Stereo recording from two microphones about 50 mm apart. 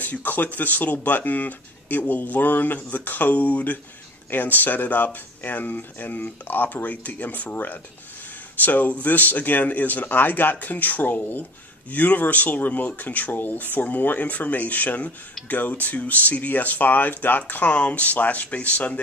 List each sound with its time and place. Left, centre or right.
0.0 s speech: left